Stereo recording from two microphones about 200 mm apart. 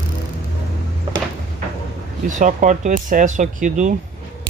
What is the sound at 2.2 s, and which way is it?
Speech, 40° right (ahead or behind).